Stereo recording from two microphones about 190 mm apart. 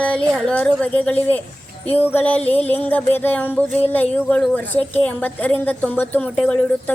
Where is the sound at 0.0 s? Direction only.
5° left (ahead or behind).